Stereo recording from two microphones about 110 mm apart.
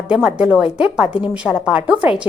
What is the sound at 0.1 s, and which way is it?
A woman's voice, 5° right (ahead or behind).